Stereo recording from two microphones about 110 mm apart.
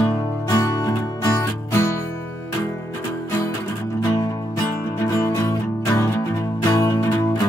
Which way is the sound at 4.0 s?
35° left (ahead or behind).